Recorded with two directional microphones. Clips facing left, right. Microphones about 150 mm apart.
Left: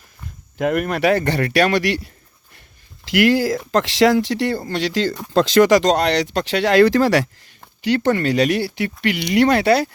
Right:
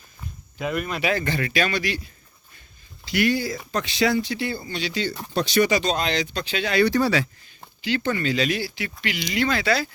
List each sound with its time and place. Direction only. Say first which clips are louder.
0.6 s speech: left 8 dB; 65° left (ahead or behind)
3.2 s speech: left 7 dB; 90° left
7.9 s speech: left 6 dB; 70° left (ahead or behind)